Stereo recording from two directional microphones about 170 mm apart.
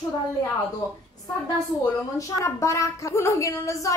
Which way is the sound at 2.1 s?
20° left (ahead or behind).